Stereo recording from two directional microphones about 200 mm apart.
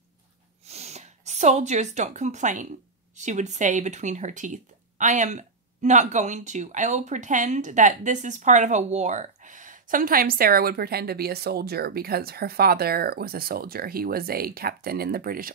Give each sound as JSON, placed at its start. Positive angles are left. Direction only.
{"t": 0.7, "sound": "speech", "side_deg": -30}